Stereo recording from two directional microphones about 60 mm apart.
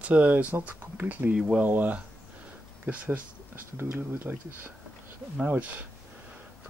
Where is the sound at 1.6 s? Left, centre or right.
Right.